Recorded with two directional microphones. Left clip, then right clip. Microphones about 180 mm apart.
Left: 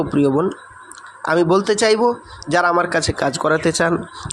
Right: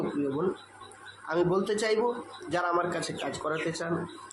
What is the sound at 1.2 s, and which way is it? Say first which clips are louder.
A man's voice: left 12 dB; 45° left (ahead or behind).